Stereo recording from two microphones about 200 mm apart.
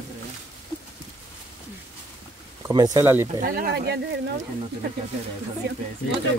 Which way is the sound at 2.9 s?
10° right (ahead or behind).